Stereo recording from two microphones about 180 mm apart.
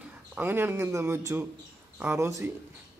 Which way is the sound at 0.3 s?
10° right (ahead or behind).